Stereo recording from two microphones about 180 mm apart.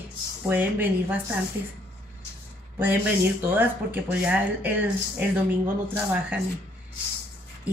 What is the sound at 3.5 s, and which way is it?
Speech, 10° right (ahead or behind).